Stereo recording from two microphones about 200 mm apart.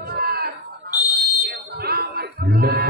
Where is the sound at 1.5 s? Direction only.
55° right (ahead or behind).